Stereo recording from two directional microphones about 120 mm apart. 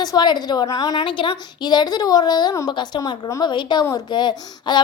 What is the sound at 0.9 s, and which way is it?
A woman's voice, 45° left (ahead or behind).